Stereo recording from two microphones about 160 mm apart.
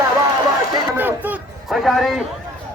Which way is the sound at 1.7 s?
Centre (ahead or behind).